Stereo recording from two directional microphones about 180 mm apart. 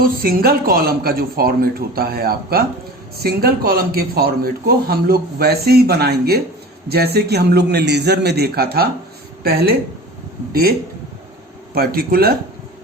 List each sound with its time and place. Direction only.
0.0 s speech: 55° right (ahead or behind)